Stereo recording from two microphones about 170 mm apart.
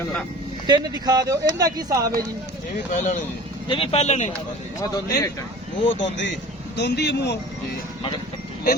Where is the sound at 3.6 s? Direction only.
35° left (ahead or behind).